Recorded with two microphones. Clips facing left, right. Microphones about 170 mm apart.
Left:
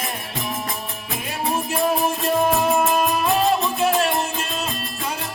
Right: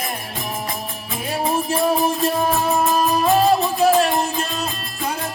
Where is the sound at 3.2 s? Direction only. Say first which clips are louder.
Right 3 dB; 40° right (ahead or behind).